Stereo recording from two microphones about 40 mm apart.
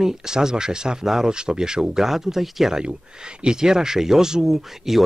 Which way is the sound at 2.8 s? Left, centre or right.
Right.